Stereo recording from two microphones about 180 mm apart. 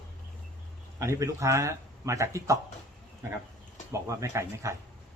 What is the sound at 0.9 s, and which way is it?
A man's voice, 15° right (ahead or behind).